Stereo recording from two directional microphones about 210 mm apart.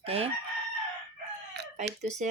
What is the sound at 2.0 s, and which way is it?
Speech, 35° right (ahead or behind).